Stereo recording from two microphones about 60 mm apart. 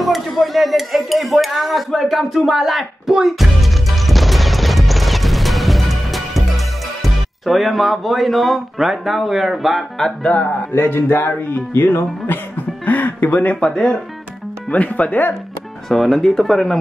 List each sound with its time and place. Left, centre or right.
0.0 s a sound: centre
10.2 s speech: left
10.8 s speech: left
13.7 s speech: centre
14.7 s speech: left
15.9 s speech: centre